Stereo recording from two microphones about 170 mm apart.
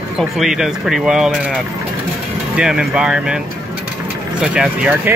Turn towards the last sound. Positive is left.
turn(degrees=-5)  # may be behind; listen again after turning